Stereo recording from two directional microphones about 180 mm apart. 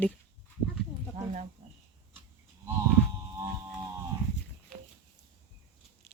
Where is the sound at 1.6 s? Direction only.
40° right (ahead or behind).